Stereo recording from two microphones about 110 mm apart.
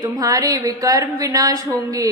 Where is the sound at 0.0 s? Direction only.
35° right (ahead or behind).